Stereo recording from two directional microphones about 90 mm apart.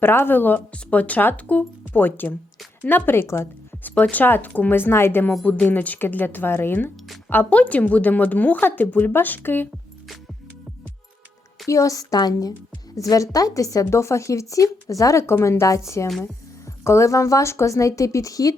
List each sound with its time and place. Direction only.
0.0 s a woman's voice: 25° left (ahead or behind)
11.7 s speech: 35° left (ahead or behind)
16.8 s speech: 30° left (ahead or behind)